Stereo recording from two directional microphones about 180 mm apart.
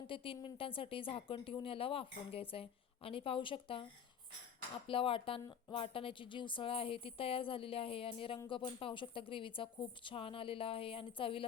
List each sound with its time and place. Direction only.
0.1 s speech: 30° left (ahead or behind)
4.9 s speech: 30° left (ahead or behind)